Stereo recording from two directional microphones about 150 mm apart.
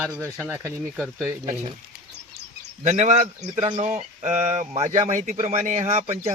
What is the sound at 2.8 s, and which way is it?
A man's voice, 55° right (ahead or behind).